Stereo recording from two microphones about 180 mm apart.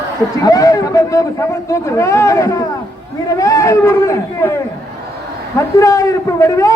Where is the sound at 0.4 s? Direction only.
20° left (ahead or behind).